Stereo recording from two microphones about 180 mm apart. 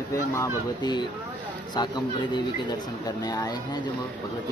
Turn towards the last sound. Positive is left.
turn(degrees=20)  # may be behind; listen again after turning